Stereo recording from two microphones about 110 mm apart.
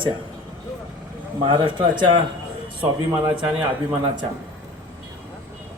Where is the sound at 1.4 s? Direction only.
50° right (ahead or behind).